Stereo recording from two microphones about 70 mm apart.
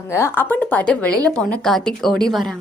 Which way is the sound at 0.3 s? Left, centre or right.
Left.